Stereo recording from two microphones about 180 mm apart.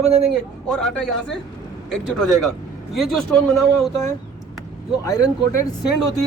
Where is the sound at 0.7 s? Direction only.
Centre (ahead or behind).